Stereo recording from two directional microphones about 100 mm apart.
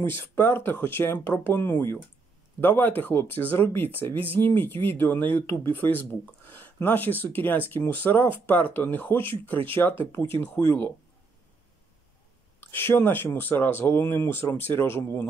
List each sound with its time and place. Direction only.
0.0 s speech: 20° left (ahead or behind)
12.5 s speech: 20° left (ahead or behind)